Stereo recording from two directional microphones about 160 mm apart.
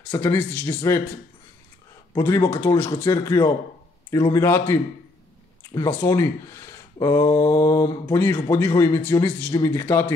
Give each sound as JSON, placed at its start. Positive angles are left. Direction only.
{"t": 0.1, "sound": "speech", "side_deg": 10}
{"t": 2.1, "sound": "speech", "side_deg": 20}
{"t": 5.9, "sound": "speech", "side_deg": 15}